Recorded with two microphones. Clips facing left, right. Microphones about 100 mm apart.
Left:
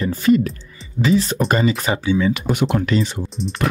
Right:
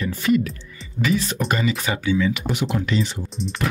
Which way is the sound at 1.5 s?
35° left (ahead or behind).